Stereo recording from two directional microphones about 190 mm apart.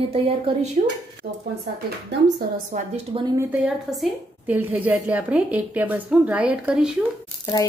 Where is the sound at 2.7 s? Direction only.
40° right (ahead or behind).